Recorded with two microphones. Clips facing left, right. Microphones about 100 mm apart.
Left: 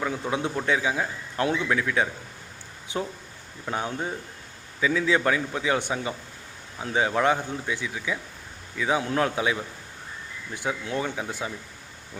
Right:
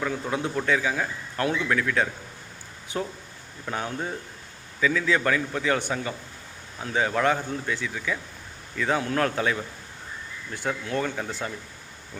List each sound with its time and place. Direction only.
0.0 s a man's voice: 15° left (ahead or behind)